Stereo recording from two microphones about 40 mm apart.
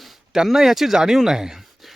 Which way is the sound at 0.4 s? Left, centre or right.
Centre.